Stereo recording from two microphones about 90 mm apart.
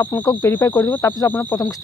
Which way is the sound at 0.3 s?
45° left (ahead or behind).